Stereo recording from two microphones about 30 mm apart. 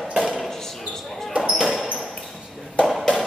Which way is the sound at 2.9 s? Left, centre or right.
Centre.